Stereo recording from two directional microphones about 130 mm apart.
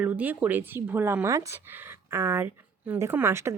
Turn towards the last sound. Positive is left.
turn(degrees=-20)  # may be behind; listen again after turning